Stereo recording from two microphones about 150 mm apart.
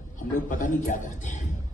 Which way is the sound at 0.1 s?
60° left (ahead or behind).